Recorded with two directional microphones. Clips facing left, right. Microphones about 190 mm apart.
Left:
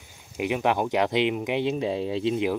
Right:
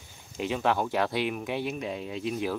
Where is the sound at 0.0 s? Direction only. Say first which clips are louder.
Left 4 dB; 15° left (ahead or behind).